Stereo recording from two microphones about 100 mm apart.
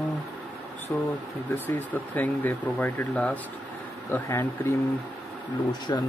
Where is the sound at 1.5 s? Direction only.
15° left (ahead or behind).